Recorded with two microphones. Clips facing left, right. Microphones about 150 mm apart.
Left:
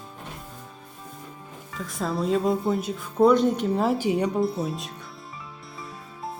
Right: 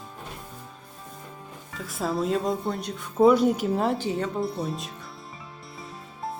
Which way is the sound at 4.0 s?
15° left (ahead or behind).